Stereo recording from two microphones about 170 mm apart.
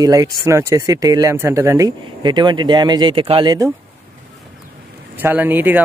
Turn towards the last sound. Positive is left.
turn(degrees=-10)  # may be behind; listen again after turning